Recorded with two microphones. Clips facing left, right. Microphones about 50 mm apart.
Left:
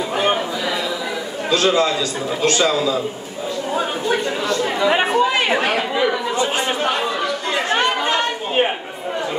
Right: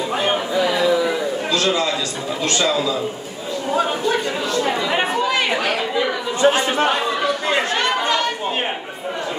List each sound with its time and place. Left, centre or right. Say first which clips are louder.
1.5 s a man's voice: left 5 dB; left
4.9 s speech: left 3 dB; centre
6.4 s speech: right 8 dB; right
7.7 s chatter: left 1 dB; left